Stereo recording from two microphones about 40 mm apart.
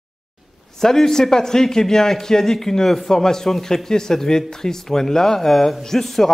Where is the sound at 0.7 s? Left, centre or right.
Centre.